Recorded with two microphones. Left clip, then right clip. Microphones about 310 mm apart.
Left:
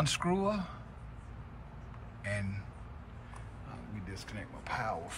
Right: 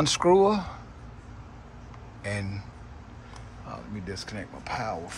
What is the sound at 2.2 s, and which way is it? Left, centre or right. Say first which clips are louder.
Speech: right 5 dB; centre.